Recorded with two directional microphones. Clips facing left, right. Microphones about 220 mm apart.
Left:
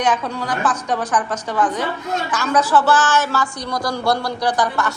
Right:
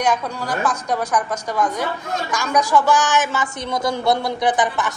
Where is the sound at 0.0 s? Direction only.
10° right (ahead or behind).